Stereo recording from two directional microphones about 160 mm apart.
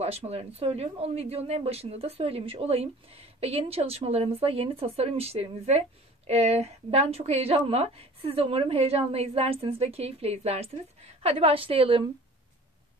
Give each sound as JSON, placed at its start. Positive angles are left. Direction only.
{"t": 0.0, "sound": "speech", "side_deg": -40}